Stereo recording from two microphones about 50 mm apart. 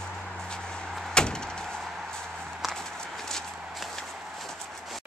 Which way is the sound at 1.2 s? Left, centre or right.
Centre.